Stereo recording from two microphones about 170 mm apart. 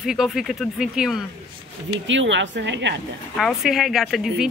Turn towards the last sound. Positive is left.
turn(degrees=0)  # may be behind; listen again after turning